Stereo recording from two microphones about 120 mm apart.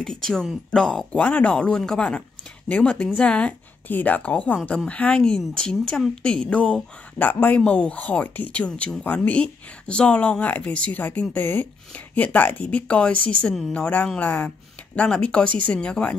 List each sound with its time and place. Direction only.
0.0 s a woman's voice: 5° left (ahead or behind)